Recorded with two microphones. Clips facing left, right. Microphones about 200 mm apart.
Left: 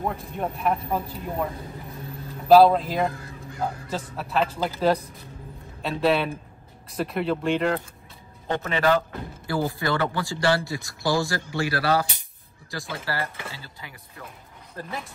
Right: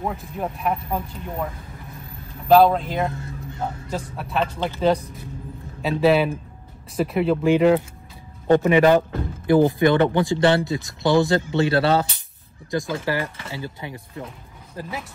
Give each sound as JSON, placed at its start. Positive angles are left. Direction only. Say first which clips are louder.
{"t": 0.0, "sound": "speech", "louder": "right 1 dB", "side_deg": 0}
{"t": 3.1, "sound": "music", "louder": "right 3 dB", "side_deg": -25}
{"t": 3.9, "sound": "speech", "louder": "right 2 dB", "side_deg": 0}
{"t": 14.8, "sound": "speech", "louder": "right 2 dB", "side_deg": -5}